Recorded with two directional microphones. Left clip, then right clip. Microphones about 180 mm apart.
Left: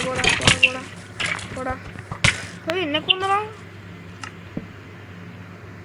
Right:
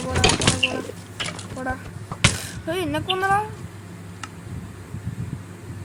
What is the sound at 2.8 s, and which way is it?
Speech, 15° right (ahead or behind).